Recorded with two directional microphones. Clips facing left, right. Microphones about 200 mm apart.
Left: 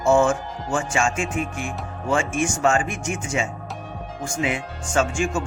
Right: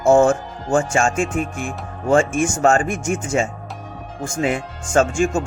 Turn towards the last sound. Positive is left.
turn(degrees=-45)  # may be behind; listen again after turning